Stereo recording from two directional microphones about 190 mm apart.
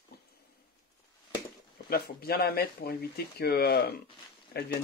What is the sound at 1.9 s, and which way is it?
Speech, 50° left (ahead or behind).